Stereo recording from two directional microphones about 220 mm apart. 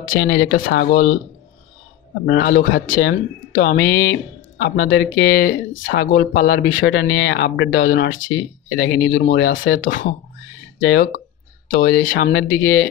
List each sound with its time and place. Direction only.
0.0 s speech: 45° left (ahead or behind)
2.2 s speech: 45° left (ahead or behind)